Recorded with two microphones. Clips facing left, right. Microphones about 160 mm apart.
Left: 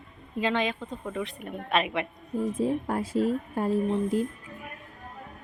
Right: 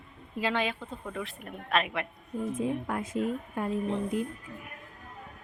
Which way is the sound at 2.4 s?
35° left (ahead or behind).